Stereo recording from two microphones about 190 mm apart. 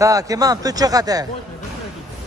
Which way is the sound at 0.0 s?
15° right (ahead or behind).